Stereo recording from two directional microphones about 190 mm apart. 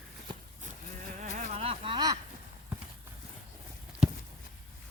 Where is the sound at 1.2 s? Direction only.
35° right (ahead or behind).